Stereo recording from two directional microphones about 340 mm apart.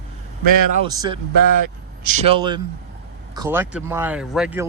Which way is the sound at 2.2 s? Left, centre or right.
Centre.